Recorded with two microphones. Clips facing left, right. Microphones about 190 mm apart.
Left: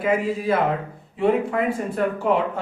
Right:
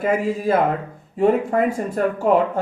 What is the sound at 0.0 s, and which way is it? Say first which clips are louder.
Speech: right 2 dB; 45° right (ahead or behind).